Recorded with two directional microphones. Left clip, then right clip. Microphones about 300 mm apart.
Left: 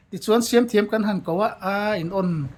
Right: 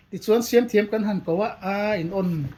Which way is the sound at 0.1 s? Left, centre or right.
Centre.